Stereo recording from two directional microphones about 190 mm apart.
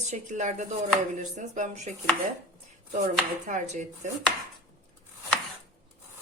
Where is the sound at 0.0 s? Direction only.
40° right (ahead or behind).